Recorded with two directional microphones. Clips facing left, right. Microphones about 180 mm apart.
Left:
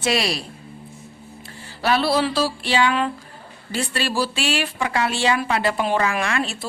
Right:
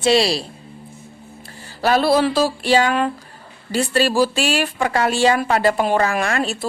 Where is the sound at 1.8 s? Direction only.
45° right (ahead or behind).